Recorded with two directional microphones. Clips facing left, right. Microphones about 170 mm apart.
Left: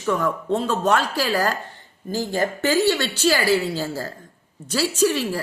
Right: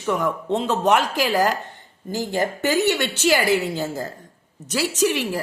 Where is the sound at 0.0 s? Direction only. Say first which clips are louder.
Even; 15° right (ahead or behind).